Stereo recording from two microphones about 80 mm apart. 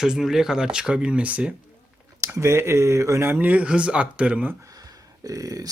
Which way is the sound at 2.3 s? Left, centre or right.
Right.